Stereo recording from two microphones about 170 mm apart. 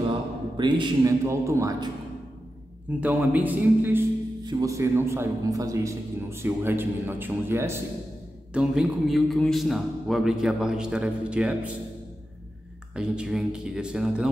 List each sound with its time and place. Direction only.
0.6 s a man's voice: 25° right (ahead or behind)
3.0 s a man's voice: 10° right (ahead or behind)
8.5 s a man's voice: centre (ahead or behind)
12.9 s a man's voice: 5° right (ahead or behind)